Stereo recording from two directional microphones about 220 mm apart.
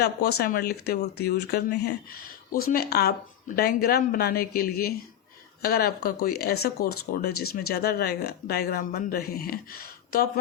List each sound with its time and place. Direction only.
0.0 s speech: 45° left (ahead or behind)